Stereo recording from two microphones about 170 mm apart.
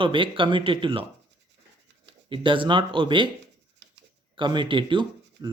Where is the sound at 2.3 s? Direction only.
30° right (ahead or behind).